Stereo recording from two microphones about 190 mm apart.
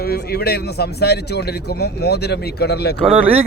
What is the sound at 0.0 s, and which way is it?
A man's voice, 55° left (ahead or behind).